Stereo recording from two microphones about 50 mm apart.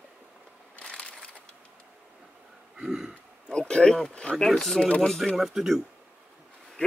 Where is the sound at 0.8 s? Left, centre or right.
Centre.